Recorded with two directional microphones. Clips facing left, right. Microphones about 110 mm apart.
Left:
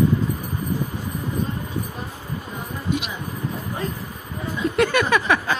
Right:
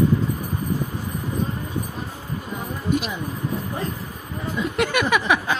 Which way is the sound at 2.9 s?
50° right (ahead or behind).